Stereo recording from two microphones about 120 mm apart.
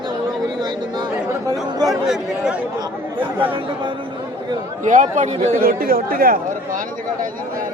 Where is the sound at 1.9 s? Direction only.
5° right (ahead or behind).